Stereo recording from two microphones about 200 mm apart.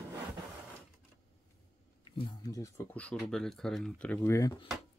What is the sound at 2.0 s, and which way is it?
Speech, 25° left (ahead or behind).